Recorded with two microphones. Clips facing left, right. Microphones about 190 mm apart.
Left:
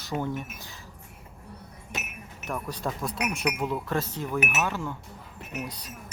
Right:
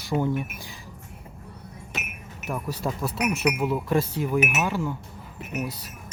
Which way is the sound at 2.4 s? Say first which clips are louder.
Right 3 dB; 5° right (ahead or behind).